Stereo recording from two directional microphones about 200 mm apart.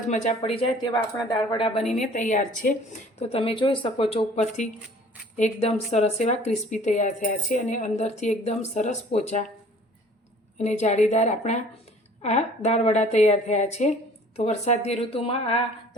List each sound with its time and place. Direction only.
0.1 s speech: 35° left (ahead or behind)
1.9 s speech: 40° left (ahead or behind)
3.2 s speech: 30° left (ahead or behind)
10.6 s speech: 35° left (ahead or behind)